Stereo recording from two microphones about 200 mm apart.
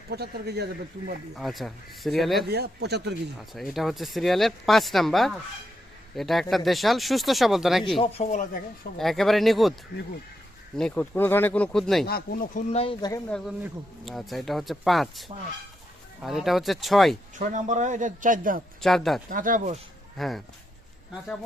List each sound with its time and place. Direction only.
0.1 s speech: 55° right (ahead or behind)
1.4 s speech: centre (ahead or behind)
2.5 s speech: 55° right (ahead or behind)
3.3 s speech: centre (ahead or behind)
7.9 s a man's voice: 30° left (ahead or behind)
9.0 s speech: centre (ahead or behind)
10.8 s speech: 5° left (ahead or behind)
12.0 s speech: 50° left (ahead or behind)
12.7 s speech: 25° left (ahead or behind)
13.3 s speech: centre (ahead or behind)
17.3 s a man's voice: 40° right (ahead or behind)
18.8 s speech: centre (ahead or behind)
19.3 s a man's voice: 40° right (ahead or behind)
20.1 s speech: centre (ahead or behind)